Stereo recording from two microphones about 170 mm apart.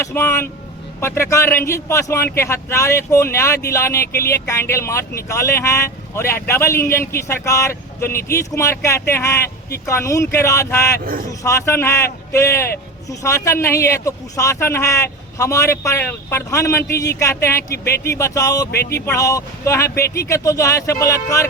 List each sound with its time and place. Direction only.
0.0 s a man's voice: 15° left (ahead or behind)
17.8 s speech: 65° left (ahead or behind)
18.2 s a man's voice: 20° left (ahead or behind)